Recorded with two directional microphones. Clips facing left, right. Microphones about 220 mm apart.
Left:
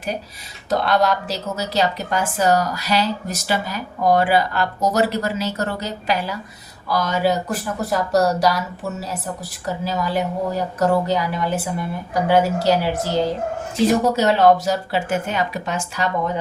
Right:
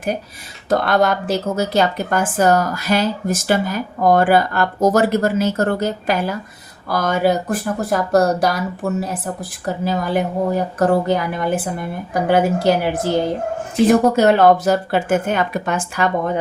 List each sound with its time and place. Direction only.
0.7 s speech: 50° right (ahead or behind)